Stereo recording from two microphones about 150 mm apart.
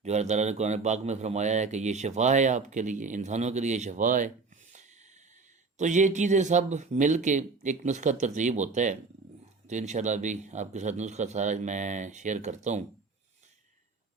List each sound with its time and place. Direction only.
0.0 s speech: 50° right (ahead or behind)
5.7 s speech: 55° right (ahead or behind)